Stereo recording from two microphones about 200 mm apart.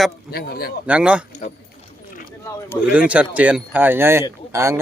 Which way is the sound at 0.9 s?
5° right (ahead or behind).